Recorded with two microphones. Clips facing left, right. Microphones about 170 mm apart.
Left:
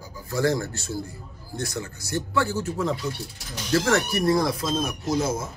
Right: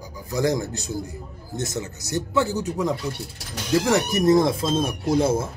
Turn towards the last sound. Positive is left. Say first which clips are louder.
# right 5 dB
turn(degrees=-30)  # may be behind; listen again after turning